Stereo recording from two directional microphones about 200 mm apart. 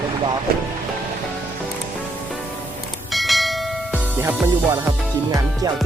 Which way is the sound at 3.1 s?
Centre (ahead or behind).